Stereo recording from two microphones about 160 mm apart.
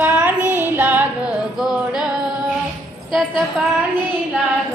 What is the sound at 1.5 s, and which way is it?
Music, 5° right (ahead or behind).